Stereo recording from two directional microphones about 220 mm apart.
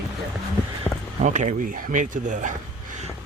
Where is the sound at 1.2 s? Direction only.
35° right (ahead or behind).